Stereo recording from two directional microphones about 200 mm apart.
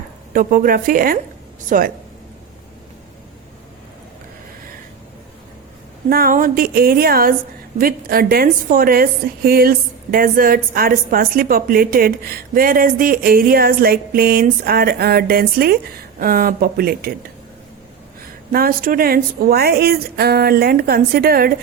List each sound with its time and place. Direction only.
0.3 s a woman's voice: 45° right (ahead or behind)
6.1 s a woman's voice: 45° right (ahead or behind)
18.5 s a woman's voice: 45° right (ahead or behind)